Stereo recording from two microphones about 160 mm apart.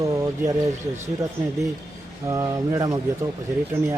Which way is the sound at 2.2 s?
20° right (ahead or behind).